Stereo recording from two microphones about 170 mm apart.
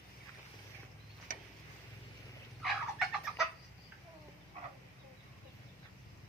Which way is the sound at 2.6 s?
Centre (ahead or behind).